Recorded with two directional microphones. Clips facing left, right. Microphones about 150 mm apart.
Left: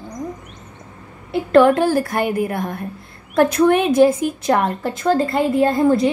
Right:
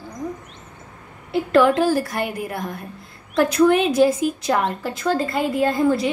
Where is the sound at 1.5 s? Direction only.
55° left (ahead or behind).